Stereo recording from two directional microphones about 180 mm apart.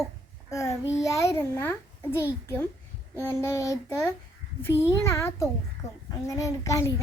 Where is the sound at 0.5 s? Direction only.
15° left (ahead or behind).